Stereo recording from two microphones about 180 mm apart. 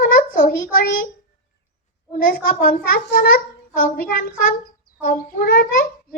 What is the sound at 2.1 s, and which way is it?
A child's voice, 50° left (ahead or behind).